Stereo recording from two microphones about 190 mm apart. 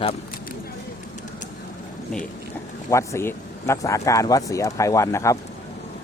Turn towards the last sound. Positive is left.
turn(degrees=15)  # may be behind; listen again after turning